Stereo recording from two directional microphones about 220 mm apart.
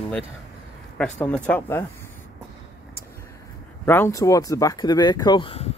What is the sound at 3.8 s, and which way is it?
Speech, 10° left (ahead or behind).